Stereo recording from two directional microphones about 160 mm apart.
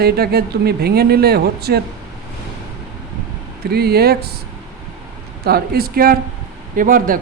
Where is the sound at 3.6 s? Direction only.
80° right.